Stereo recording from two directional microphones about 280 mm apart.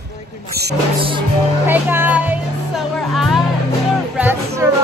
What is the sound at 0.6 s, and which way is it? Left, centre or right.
Speech, right.